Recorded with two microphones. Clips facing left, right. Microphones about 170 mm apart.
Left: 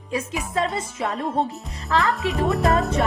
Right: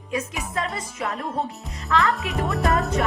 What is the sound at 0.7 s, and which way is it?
Music, 25° left (ahead or behind).